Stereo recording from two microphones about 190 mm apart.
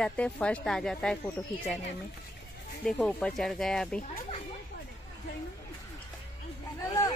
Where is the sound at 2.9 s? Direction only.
5° left (ahead or behind).